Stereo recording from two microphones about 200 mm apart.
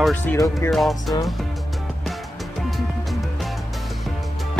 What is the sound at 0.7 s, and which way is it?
Speech, centre (ahead or behind).